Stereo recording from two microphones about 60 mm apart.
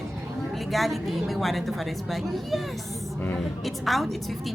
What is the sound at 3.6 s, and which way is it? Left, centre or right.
Speech, centre.